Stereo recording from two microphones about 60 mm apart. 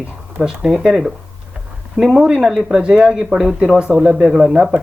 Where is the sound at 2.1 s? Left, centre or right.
Centre.